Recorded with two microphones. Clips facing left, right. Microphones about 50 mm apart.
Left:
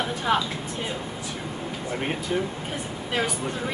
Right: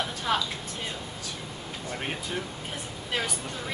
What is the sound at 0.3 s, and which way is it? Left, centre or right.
Speech, centre.